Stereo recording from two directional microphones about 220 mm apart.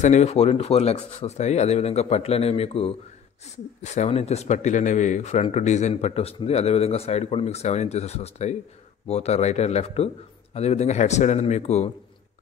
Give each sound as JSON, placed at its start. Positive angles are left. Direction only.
{"t": 0.0, "sound": "speech", "side_deg": 30}